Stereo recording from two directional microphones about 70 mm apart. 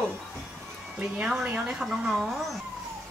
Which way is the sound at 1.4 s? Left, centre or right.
Centre.